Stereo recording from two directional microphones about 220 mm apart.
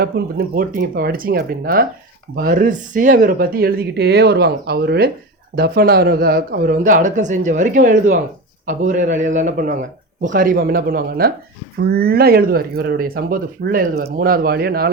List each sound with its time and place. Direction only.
0.0 s speech: 40° right (ahead or behind)